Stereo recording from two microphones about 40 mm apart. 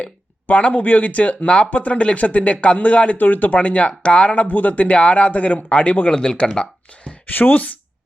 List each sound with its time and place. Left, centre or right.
0.4 s speech: left
3.2 s speech: left
4.9 s speech: left
6.1 s speech: centre
7.3 s speech: left